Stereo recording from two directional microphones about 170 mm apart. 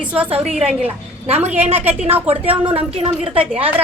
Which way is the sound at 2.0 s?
10° right (ahead or behind).